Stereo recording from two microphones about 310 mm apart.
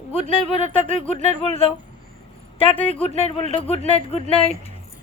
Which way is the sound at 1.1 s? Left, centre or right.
Centre.